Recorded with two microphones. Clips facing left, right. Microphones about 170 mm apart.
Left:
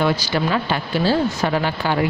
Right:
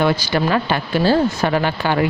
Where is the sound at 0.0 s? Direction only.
55° right (ahead or behind).